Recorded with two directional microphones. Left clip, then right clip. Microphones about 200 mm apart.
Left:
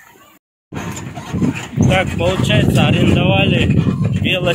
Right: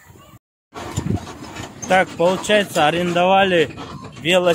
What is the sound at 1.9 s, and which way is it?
Speech, 30° right (ahead or behind).